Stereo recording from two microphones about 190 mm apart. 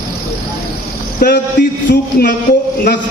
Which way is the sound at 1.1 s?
45° left (ahead or behind).